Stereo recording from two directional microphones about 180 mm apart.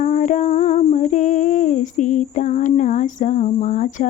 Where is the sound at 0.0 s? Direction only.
45° left (ahead or behind).